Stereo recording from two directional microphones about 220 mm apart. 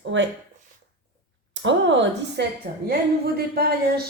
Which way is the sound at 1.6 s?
55° right (ahead or behind).